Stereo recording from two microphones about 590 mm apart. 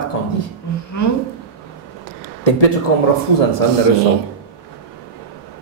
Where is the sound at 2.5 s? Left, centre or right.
Left.